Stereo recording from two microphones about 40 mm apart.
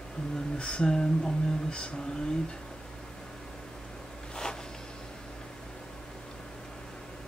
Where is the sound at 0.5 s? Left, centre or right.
Left.